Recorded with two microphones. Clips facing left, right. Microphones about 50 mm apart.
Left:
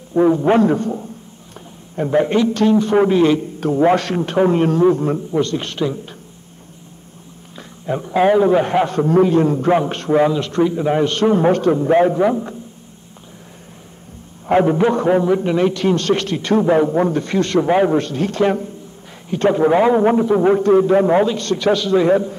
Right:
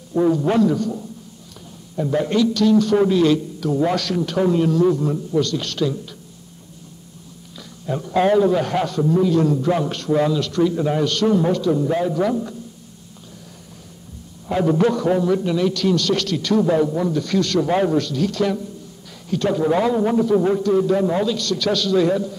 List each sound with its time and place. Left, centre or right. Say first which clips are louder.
0.1 s a man's voice: left 4 dB; left
2.0 s a man's voice: left 3 dB; left
7.5 s a man's voice: left 3 dB; left
9.0 s a man's voice: left 3 dB; left
14.5 s a man's voice: left 4 dB; left